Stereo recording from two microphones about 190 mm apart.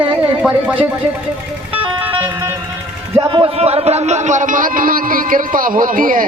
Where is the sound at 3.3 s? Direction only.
30° right (ahead or behind).